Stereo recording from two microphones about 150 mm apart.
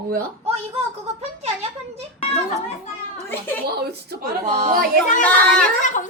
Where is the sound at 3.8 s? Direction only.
90° right.